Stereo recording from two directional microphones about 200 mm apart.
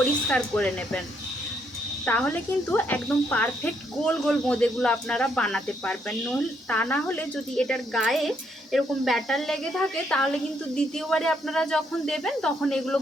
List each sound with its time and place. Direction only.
0.3 s speech: 5° left (ahead or behind)
2.0 s speech: 10° left (ahead or behind)